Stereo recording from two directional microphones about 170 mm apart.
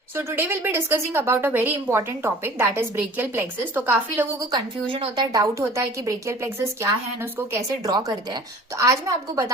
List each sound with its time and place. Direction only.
0.2 s a woman's voice: 15° right (ahead or behind)
4.5 s a woman's voice: 25° right (ahead or behind)